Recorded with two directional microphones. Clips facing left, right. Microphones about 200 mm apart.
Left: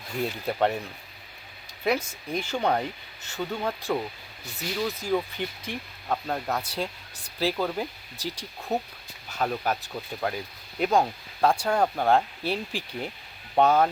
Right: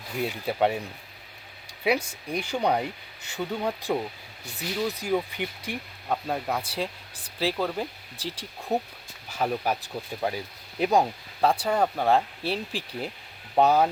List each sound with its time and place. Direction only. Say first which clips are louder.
0.3 s speech: right 1 dB; 5° right (ahead or behind)
1.8 s speech: right 1 dB; 10° right (ahead or behind)
8.7 s speech: right 1 dB; 15° right (ahead or behind)